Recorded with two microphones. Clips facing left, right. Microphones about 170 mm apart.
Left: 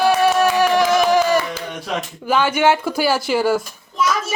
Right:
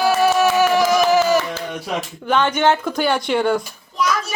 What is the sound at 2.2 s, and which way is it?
A child's voice, 5° left (ahead or behind).